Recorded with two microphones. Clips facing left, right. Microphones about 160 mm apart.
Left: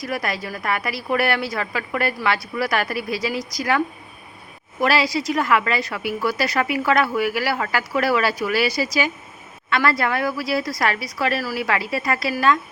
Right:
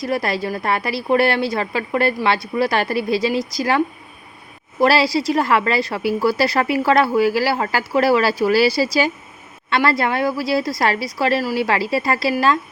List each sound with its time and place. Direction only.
0.0 s a woman's voice: 30° right (ahead or behind)